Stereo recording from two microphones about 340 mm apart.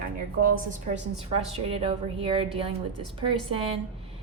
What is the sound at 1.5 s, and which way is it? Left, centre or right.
A woman's voice, centre.